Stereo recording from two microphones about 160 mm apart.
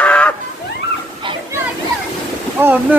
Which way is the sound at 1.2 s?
30° right (ahead or behind).